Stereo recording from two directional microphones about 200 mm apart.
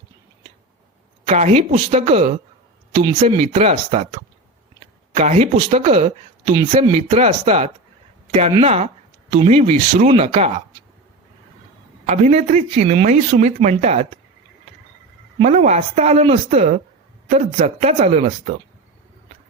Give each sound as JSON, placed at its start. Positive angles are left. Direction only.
{"t": 1.3, "sound": "speech", "side_deg": -35}
{"t": 12.0, "sound": "speech", "side_deg": -35}
{"t": 15.4, "sound": "speech", "side_deg": -35}